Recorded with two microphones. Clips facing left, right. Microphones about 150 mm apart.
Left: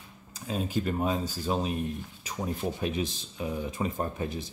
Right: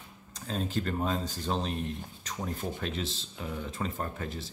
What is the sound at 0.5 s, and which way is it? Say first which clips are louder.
Speech: left 2 dB; 10° left (ahead or behind).